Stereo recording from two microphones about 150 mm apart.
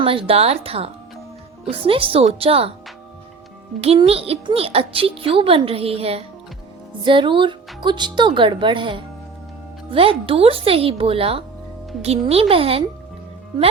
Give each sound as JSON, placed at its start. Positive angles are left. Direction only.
{"t": 0.0, "sound": "a child's voice", "side_deg": -40}
{"t": 3.8, "sound": "a child's voice", "side_deg": -40}